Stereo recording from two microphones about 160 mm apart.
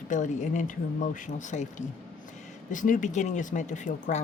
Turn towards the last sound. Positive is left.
turn(degrees=50)  # may be behind; listen again after turning